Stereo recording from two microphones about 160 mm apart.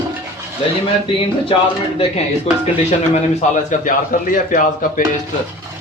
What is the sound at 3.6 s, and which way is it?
A man's voice, 55° left (ahead or behind).